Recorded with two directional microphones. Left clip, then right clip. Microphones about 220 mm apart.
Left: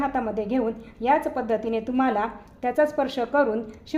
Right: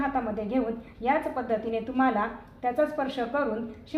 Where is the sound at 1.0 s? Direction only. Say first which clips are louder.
Left 4 dB; 55° left (ahead or behind).